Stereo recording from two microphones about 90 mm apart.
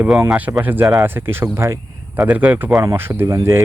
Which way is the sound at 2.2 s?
15° right (ahead or behind).